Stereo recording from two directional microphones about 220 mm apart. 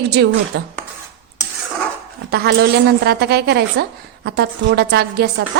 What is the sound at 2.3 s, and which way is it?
A woman's voice, 50° right (ahead or behind).